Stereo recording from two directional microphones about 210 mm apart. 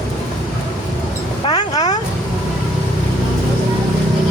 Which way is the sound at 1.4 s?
20° left (ahead or behind).